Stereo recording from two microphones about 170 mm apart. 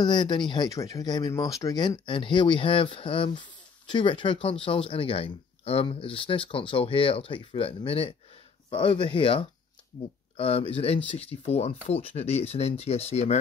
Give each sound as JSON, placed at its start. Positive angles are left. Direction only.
{"t": 0.0, "sound": "speech", "side_deg": 25}